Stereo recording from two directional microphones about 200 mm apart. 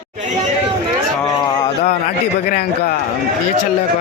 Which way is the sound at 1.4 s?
15° left (ahead or behind).